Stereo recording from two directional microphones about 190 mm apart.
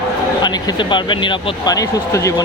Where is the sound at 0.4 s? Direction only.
25° left (ahead or behind).